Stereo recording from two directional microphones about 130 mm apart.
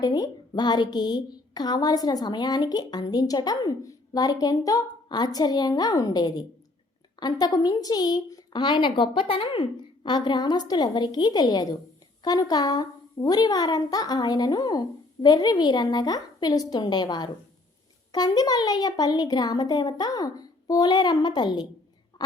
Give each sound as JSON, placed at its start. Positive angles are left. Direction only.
{"t": 0.0, "sound": "a woman's voice", "side_deg": 30}